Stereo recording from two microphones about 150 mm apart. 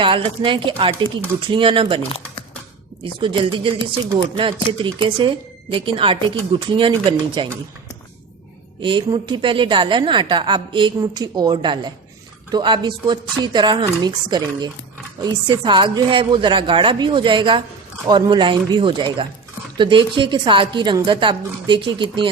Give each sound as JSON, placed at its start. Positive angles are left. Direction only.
{"t": 0.0, "sound": "a woman's voice", "side_deg": -35}
{"t": 3.0, "sound": "a woman's voice", "side_deg": -35}
{"t": 8.8, "sound": "a woman's voice", "side_deg": -35}